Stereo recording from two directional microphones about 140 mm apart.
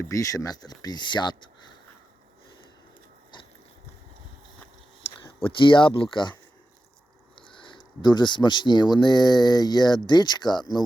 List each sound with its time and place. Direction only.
0.0 s speech: 25° left (ahead or behind)
5.4 s speech: 35° left (ahead or behind)
7.3 s speech: 35° left (ahead or behind)